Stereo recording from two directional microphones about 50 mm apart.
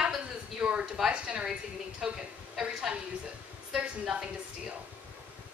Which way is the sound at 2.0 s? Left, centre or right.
Centre.